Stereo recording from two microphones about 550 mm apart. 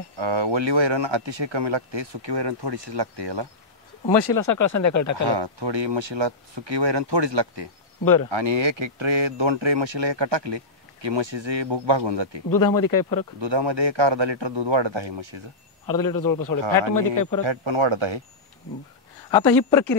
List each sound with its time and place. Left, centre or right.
0.2 s speech: right
4.3 s speech: left
5.3 s speech: right
8.0 s speech: left
8.3 s speech: right
12.4 s speech: left
13.4 s speech: right
15.9 s speech: left
17.5 s speech: right
19.3 s speech: centre